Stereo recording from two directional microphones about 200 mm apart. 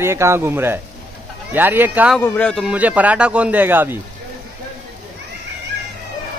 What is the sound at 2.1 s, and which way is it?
Speech, 5° left (ahead or behind).